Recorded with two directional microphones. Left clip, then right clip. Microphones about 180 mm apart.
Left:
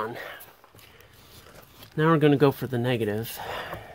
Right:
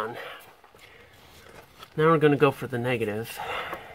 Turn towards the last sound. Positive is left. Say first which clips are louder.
# right 2 dB
turn(degrees=30)  # may be behind; listen again after turning